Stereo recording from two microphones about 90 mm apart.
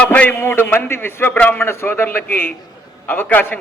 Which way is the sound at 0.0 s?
20° left (ahead or behind).